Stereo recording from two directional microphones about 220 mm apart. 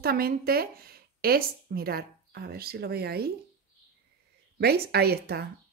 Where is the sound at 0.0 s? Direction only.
45° right (ahead or behind).